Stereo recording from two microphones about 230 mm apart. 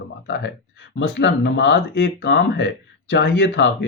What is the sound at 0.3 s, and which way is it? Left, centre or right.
Speech, left.